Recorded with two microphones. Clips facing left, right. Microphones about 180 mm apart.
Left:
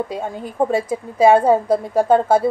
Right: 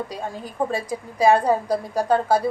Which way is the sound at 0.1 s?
25° left (ahead or behind).